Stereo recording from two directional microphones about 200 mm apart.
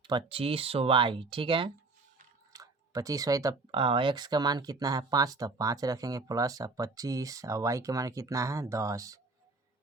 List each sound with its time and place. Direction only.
0.0 s speech: 25° right (ahead or behind)